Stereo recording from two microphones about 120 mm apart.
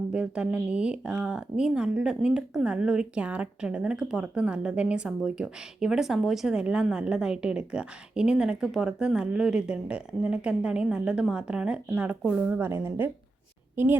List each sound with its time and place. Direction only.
0.1 s speech: 10° right (ahead or behind)